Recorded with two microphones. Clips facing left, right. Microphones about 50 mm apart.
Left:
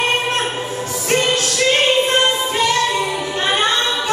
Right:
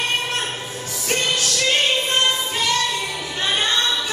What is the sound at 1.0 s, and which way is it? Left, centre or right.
Music, left.